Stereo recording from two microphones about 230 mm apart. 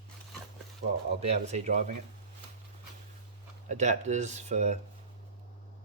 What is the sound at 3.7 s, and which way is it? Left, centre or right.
Speech, right.